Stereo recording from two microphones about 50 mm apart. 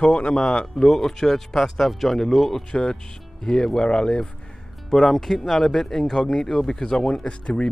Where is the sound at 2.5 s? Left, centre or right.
Centre.